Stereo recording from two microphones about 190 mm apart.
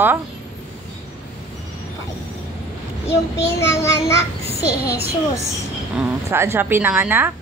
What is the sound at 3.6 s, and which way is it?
Child singing, 15° left (ahead or behind).